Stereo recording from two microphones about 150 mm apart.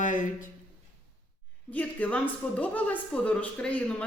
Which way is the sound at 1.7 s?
10° left (ahead or behind).